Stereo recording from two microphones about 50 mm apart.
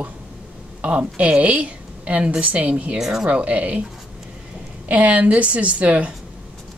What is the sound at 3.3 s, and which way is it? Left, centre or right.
Speech, right.